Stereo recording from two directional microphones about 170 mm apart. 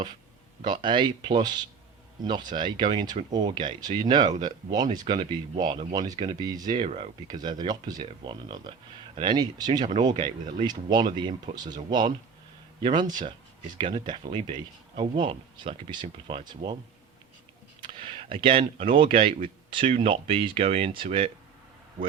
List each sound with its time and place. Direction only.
0.6 s speech: 25° right (ahead or behind)
17.7 s a sound: 30° right (ahead or behind)
18.3 s speech: 30° right (ahead or behind)